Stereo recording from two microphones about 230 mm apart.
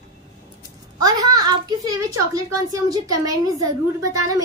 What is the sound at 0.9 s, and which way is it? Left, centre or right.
A child's voice, centre.